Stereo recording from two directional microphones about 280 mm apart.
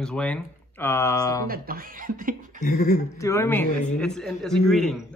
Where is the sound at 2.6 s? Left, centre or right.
Left.